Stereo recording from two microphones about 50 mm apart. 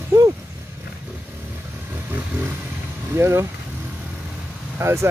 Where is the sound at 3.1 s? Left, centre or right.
Right.